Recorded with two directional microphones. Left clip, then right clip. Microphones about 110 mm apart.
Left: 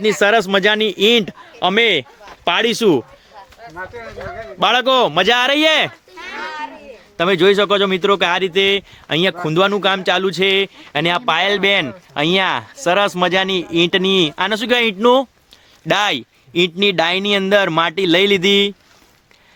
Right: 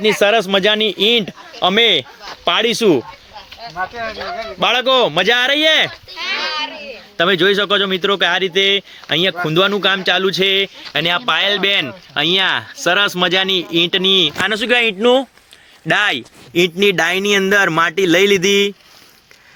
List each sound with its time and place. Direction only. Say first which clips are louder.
0.2 s speech: even; 45° left (ahead or behind)
4.0 s speech: right 6 dB; centre (ahead or behind)
4.6 s speech: even; 45° left (ahead or behind); by 14.6 s 25° left (ahead or behind)
14.6 s speech: right 1 dB; 40° left (ahead or behind)
15.9 s speech: right 1 dB; 35° left (ahead or behind)